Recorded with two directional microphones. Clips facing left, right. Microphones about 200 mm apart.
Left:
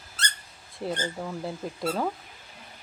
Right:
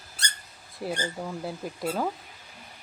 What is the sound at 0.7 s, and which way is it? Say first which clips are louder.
Speech: left 1 dB; 10° right (ahead or behind).